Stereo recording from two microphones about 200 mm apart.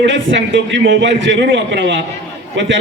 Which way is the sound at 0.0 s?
65° right (ahead or behind).